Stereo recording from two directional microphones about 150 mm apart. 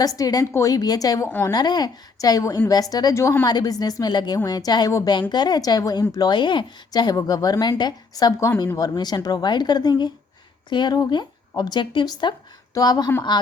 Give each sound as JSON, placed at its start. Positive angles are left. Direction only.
{"t": 0.0, "sound": "a woman's voice", "side_deg": 25}